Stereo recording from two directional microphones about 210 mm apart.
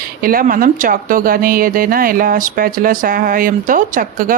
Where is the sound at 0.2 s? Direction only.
45° right (ahead or behind).